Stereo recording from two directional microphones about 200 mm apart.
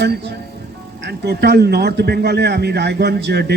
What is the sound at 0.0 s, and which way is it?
A man's voice, 55° right (ahead or behind).